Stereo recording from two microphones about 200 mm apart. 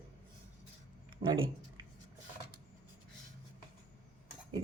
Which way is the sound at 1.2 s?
40° right (ahead or behind).